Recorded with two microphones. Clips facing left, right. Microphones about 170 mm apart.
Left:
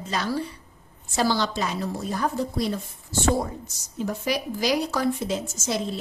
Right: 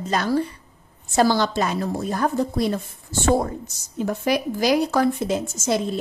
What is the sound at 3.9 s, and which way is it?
A woman's voice, 55° right (ahead or behind).